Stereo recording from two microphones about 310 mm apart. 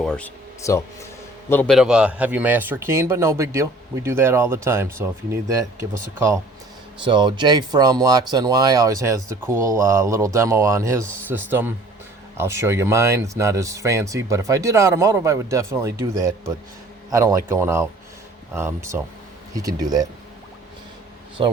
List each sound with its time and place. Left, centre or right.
0.0 s a sound: centre
1.5 s a man's voice: centre
21.4 s a man's voice: centre